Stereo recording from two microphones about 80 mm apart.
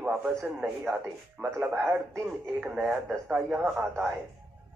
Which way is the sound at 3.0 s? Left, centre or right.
Centre.